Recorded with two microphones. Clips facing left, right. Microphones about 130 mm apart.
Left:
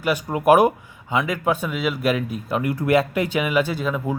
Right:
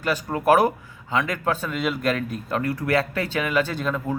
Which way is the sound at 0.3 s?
15° left (ahead or behind).